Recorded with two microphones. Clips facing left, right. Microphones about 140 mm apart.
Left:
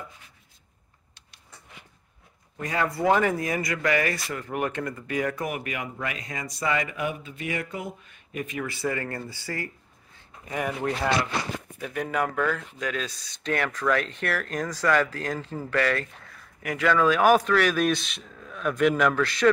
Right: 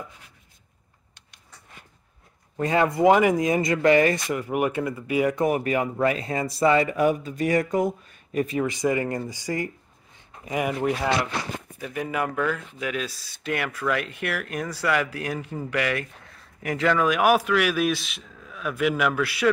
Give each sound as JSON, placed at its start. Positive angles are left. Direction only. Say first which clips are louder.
{"t": 2.6, "sound": "speech", "louder": "right 6 dB", "side_deg": -20}
{"t": 4.4, "sound": "speech", "louder": "right 4 dB", "side_deg": -10}
{"t": 5.3, "sound": "speech", "louder": "right 9 dB", "side_deg": -30}
{"t": 8.6, "sound": "speech", "louder": "right 6 dB", "side_deg": -15}
{"t": 10.1, "sound": "a sound", "louder": "right 4 dB", "side_deg": -15}
{"t": 11.8, "sound": "speech", "louder": "even", "side_deg": -5}